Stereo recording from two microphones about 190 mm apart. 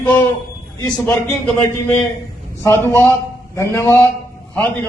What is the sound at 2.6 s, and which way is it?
A man's voice, 10° left (ahead or behind).